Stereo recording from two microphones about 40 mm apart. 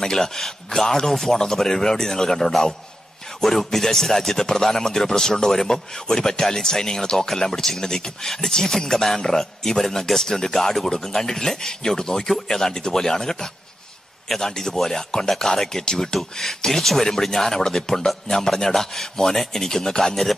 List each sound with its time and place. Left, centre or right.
0.0 s speech: centre
14.5 s speech: centre